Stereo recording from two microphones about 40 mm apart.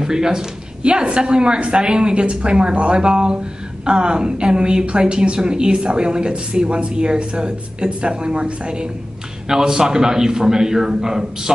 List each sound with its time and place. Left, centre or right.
0.0 s a man's voice: centre
0.8 s a woman's voice: right